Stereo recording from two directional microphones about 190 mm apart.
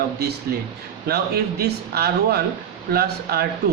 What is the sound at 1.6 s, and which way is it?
A man's voice, 55° right (ahead or behind).